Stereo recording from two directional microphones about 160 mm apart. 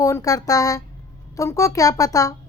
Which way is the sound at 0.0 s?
20° left (ahead or behind).